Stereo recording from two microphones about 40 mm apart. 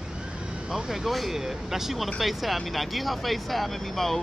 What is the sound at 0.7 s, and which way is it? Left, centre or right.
Speech, centre.